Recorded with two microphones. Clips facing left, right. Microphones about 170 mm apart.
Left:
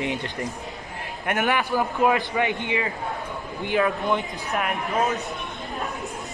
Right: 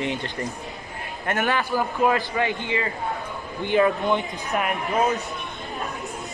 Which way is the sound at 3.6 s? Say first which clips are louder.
Right 3 dB; centre (ahead or behind).